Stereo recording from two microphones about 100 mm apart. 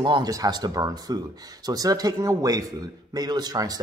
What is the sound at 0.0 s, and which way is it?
Speech, 45° right (ahead or behind).